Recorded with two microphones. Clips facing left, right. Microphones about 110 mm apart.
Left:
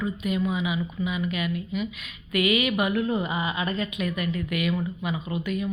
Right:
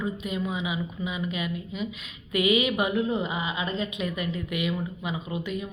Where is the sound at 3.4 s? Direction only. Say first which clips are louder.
Left 2 dB; 60° left (ahead or behind).